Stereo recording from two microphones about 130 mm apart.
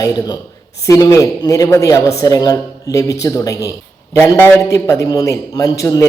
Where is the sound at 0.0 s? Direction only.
30° left (ahead or behind).